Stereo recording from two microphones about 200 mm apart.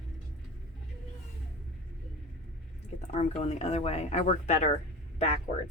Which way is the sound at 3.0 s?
35° left (ahead or behind).